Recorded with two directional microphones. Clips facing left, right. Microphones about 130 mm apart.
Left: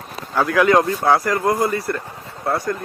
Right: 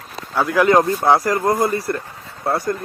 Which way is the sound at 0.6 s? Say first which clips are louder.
Right 2 dB; 30° right (ahead or behind).